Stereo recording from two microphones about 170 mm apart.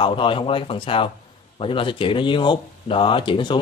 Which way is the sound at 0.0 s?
30° left (ahead or behind).